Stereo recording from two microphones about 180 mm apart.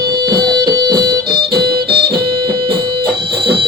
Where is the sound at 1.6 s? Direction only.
60° right (ahead or behind).